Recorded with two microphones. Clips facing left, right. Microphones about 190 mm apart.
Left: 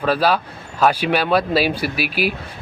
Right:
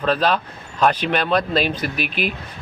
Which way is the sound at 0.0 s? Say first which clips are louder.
Left 1 dB; 10° left (ahead or behind).